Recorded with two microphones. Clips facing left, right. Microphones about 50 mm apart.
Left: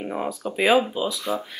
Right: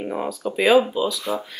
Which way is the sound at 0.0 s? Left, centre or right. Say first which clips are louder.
Right 1 dB; centre.